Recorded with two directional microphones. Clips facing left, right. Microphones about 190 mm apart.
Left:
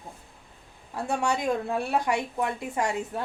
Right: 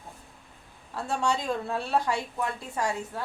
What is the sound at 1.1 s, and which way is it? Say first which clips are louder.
Speech: left 2 dB; 15° left (ahead or behind).